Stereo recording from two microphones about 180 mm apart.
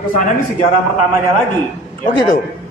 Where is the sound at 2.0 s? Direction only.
50° left (ahead or behind).